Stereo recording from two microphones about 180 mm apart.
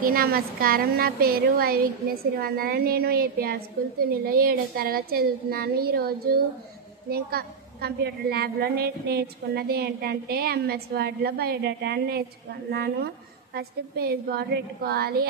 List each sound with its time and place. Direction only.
0.0 s a woman's voice: 55° right (ahead or behind)
7.1 s a woman's voice: 60° right (ahead or behind)